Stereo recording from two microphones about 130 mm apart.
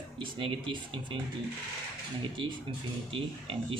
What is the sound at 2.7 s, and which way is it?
Speech, 40° right (ahead or behind).